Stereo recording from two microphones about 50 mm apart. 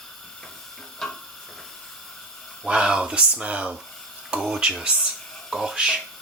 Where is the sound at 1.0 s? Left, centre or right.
Centre.